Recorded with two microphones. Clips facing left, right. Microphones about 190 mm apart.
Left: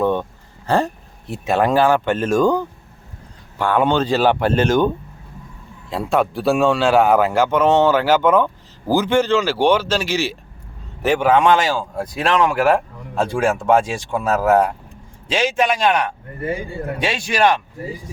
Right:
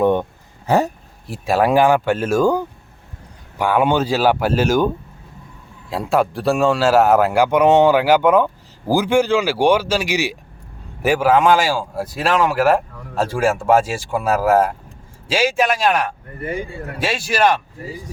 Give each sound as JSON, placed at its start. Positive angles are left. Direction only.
{"t": 0.0, "sound": "speech", "side_deg": -15}
{"t": 1.3, "sound": "speech", "side_deg": -5}
{"t": 5.9, "sound": "speech", "side_deg": 0}